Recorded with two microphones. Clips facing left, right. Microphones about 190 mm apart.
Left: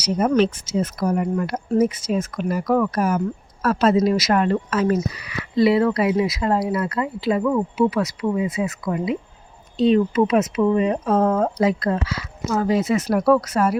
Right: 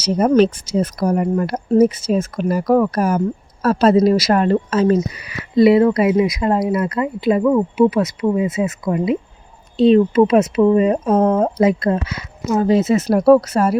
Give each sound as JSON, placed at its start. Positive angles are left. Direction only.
{"t": 0.0, "sound": "speech", "side_deg": -35}
{"t": 11.1, "sound": "speech", "side_deg": -20}